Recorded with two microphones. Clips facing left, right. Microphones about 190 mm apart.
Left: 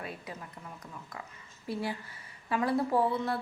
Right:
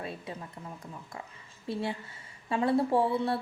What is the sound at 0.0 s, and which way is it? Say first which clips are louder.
A woman's voice: right 3 dB; 25° right (ahead or behind).